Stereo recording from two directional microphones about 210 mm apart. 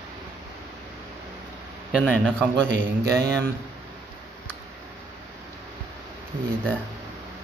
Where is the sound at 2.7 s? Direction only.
50° right (ahead or behind).